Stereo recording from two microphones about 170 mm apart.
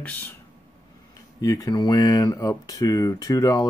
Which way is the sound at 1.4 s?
20° left (ahead or behind).